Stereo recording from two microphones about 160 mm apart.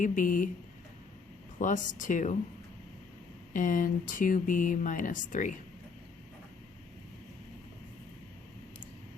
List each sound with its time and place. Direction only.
0.0 s speech: 55° left (ahead or behind)
1.5 s speech: 55° left (ahead or behind)
3.5 s speech: 55° left (ahead or behind)